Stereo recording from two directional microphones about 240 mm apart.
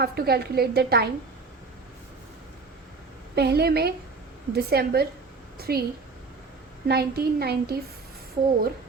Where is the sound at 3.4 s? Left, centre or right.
Right.